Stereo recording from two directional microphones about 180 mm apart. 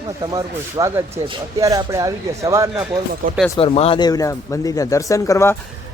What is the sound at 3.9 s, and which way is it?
Speech, 20° left (ahead or behind).